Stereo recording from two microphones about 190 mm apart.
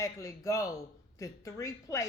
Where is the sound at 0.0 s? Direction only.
15° left (ahead or behind).